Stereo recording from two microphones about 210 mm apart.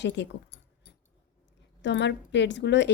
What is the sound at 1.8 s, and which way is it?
Speech, 55° left (ahead or behind).